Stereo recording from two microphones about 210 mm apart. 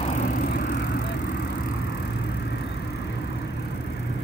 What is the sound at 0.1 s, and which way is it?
Vehicle, 50° left (ahead or behind).